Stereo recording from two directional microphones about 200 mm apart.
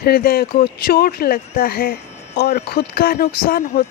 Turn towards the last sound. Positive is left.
turn(degrees=45)  # may be behind; listen again after turning